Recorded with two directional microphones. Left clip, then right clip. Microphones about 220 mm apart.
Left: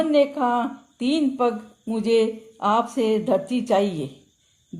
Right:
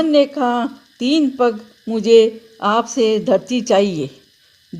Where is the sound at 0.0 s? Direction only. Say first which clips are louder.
Right 5 dB; 40° right (ahead or behind).